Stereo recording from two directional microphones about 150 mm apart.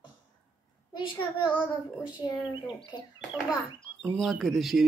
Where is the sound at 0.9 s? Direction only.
30° left (ahead or behind).